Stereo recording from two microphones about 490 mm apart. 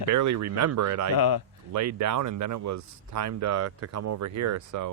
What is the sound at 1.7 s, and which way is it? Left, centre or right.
Speech, right.